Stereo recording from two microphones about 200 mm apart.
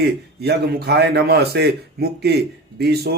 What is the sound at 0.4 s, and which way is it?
A man's voice, 55° right (ahead or behind).